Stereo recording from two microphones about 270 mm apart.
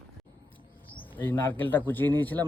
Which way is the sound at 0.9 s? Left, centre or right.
Centre.